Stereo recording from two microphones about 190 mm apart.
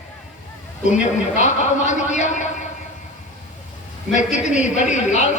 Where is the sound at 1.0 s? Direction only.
40° left (ahead or behind).